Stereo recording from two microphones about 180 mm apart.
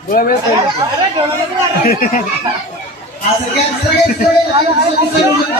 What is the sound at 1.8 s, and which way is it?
Speech, 55° left (ahead or behind).